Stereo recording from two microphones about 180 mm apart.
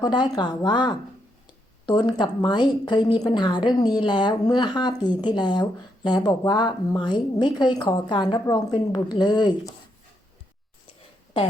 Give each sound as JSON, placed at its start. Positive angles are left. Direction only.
{"t": 0.0, "sound": "a woman's voice", "side_deg": 25}